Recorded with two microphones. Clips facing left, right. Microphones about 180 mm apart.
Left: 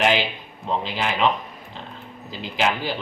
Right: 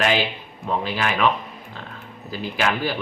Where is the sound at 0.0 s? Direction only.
15° left (ahead or behind).